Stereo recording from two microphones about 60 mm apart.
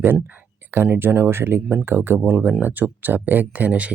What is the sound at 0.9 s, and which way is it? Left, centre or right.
Speech, right.